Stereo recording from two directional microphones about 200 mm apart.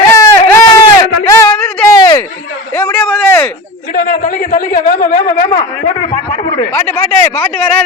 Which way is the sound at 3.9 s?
40° left (ahead or behind).